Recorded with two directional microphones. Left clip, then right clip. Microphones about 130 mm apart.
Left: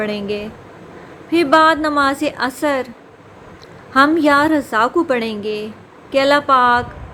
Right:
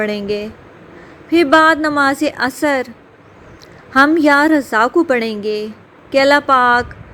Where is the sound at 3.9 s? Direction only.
50° right (ahead or behind).